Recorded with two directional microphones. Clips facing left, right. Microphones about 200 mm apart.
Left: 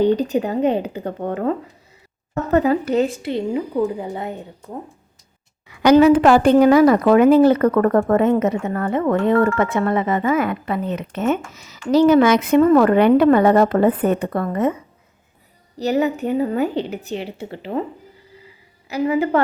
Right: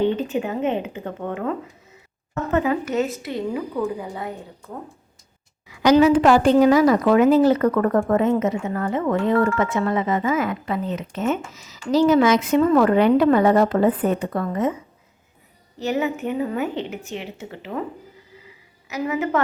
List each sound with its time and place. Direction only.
0.0 s a woman's voice: 40° left (ahead or behind)
5.6 s a woman's voice: 60° left (ahead or behind)
15.8 s a woman's voice: 35° left (ahead or behind)
18.9 s a woman's voice: 30° left (ahead or behind)